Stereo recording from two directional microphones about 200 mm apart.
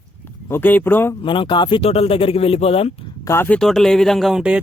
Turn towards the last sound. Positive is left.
turn(degrees=-5)  # may be behind; listen again after turning